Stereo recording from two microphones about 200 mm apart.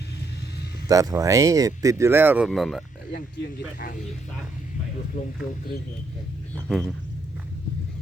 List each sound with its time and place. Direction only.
0.9 s speech: 15° right (ahead or behind); by 2.8 s centre (ahead or behind)
3.1 s speech: 45° left (ahead or behind)
5.1 s speech: 45° left (ahead or behind)
6.7 s speech: 5° left (ahead or behind)